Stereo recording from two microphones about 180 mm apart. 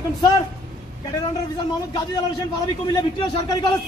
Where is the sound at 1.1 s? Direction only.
25° left (ahead or behind).